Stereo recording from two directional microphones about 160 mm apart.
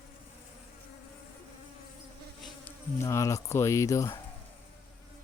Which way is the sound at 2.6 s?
20° left (ahead or behind).